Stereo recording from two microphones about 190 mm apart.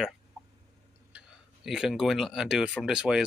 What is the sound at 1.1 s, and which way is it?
Speech, 5° right (ahead or behind).